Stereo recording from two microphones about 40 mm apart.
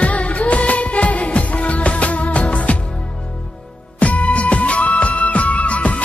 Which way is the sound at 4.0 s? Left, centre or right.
Left.